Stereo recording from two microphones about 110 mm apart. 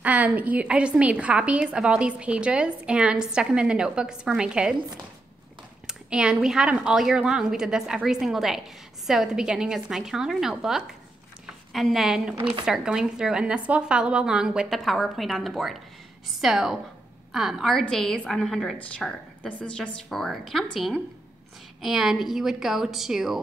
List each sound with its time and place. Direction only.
0.0 s a woman's voice: 15° right (ahead or behind)
5.9 s a woman's voice: 5° right (ahead or behind)